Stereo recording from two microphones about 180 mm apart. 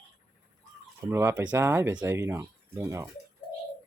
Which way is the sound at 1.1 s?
15° right (ahead or behind).